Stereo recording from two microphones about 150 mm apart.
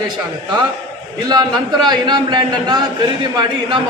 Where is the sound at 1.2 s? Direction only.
30° right (ahead or behind).